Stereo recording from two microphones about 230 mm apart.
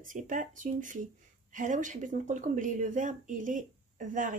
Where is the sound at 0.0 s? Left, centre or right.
Right.